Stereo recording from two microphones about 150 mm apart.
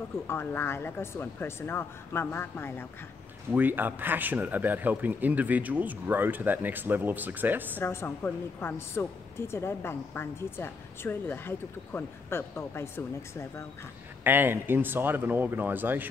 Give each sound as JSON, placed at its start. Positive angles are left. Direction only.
{"t": 0.3, "sound": "a woman's voice", "side_deg": 15}
{"t": 3.5, "sound": "speech", "side_deg": -10}
{"t": 7.8, "sound": "a woman's voice", "side_deg": 15}
{"t": 14.2, "sound": "speech", "side_deg": -15}